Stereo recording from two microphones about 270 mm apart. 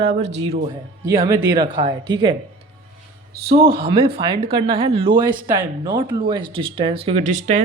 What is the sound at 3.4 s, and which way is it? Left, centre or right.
Speech, right.